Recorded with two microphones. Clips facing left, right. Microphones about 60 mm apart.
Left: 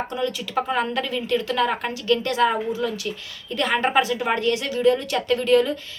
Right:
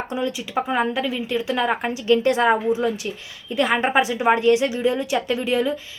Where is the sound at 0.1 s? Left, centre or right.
Centre.